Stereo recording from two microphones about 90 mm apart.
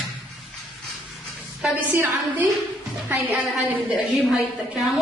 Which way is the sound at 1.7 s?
20° right (ahead or behind).